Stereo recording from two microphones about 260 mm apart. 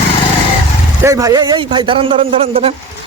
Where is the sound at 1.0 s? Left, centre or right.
Centre.